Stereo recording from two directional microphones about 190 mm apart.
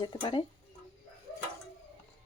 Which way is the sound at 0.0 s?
20° left (ahead or behind).